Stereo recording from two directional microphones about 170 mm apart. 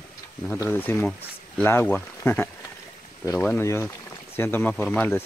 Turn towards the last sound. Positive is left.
turn(degrees=10)  # may be behind; listen again after turning